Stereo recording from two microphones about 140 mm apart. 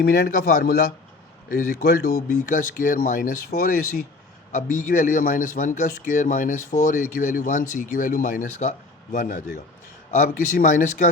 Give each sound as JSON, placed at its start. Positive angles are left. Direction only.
{"t": 0.1, "sound": "speech", "side_deg": 90}
{"t": 1.5, "sound": "speech", "side_deg": 75}
{"t": 2.3, "sound": "a man's voice", "side_deg": 75}
{"t": 4.5, "sound": "a man's voice", "side_deg": 70}